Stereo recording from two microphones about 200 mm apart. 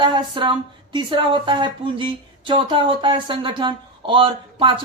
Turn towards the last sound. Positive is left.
turn(degrees=-25)  # may be behind; listen again after turning